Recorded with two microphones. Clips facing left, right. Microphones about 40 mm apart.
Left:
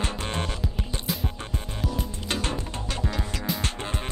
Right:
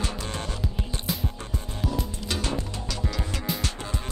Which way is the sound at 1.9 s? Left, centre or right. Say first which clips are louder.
Even; left.